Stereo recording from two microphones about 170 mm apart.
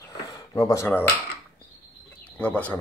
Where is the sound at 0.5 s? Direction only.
20° left (ahead or behind).